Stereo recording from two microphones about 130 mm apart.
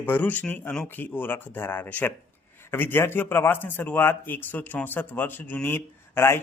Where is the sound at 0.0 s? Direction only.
15° left (ahead or behind).